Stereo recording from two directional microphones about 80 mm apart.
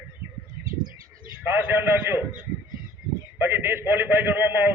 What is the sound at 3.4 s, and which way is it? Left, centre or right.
A man's voice, right.